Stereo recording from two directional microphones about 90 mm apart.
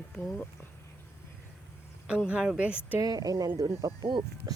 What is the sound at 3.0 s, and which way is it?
Speech, 45° right (ahead or behind).